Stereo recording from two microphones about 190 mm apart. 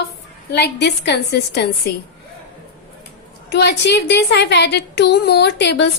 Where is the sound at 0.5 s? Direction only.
60° left (ahead or behind).